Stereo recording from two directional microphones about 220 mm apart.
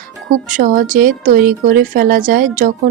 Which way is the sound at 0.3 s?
35° right (ahead or behind).